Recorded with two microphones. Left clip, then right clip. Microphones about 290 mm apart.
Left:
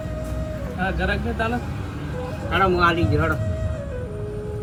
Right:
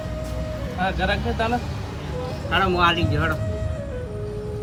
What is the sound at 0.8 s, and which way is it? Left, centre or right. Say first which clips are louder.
Speech: right 1 dB; right.